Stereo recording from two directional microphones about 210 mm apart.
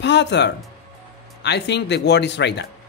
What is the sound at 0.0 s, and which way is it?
Speech, 55° left (ahead or behind).